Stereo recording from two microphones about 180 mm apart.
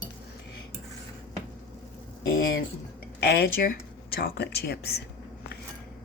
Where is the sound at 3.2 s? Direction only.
60° left (ahead or behind).